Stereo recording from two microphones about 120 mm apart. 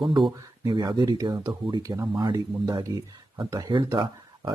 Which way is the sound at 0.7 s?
40° right (ahead or behind).